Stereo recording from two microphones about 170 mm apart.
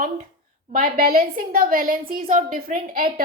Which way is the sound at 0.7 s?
55° right (ahead or behind).